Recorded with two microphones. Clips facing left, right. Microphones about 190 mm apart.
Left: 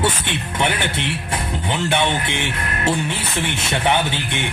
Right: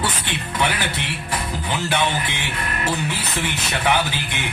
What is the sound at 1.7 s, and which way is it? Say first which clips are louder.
Speech: left 2 dB; 25° left (ahead or behind).